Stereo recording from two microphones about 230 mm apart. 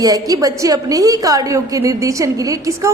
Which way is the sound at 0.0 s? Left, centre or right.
Centre.